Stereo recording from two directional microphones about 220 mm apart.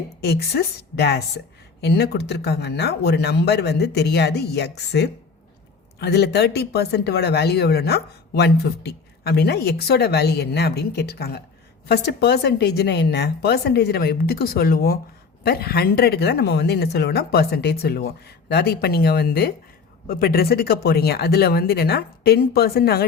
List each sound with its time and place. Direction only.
0.2 s speech: 45° left (ahead or behind)